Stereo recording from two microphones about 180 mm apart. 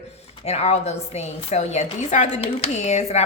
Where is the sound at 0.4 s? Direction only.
35° left (ahead or behind).